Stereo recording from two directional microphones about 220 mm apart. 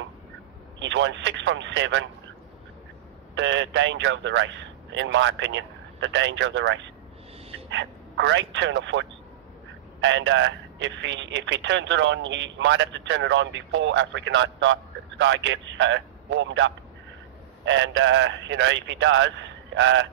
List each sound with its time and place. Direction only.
0.7 s a man's voice: 55° right (ahead or behind)
3.3 s a man's voice: 55° right (ahead or behind)
10.0 s a man's voice: 55° right (ahead or behind)